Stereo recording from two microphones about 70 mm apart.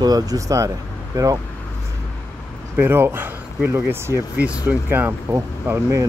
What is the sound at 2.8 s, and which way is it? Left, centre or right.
Speech, right.